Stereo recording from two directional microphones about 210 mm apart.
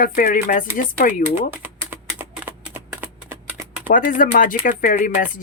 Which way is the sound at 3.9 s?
40° left (ahead or behind).